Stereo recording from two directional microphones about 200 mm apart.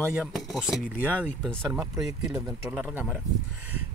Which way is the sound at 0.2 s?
Centre (ahead or behind).